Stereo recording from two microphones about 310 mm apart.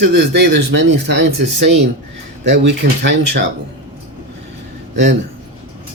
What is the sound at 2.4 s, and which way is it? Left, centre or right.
Speech, right.